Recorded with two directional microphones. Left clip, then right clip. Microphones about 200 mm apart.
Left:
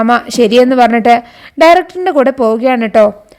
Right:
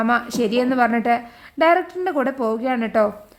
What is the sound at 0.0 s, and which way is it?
Speech, 35° left (ahead or behind).